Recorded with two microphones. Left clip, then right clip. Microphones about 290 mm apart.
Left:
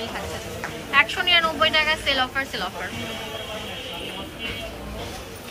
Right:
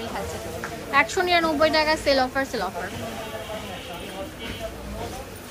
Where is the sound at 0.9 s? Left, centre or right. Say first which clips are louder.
Left 2 dB; centre.